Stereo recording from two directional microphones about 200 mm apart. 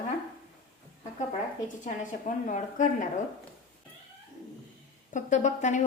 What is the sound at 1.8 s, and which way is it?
A woman's voice, 35° left (ahead or behind).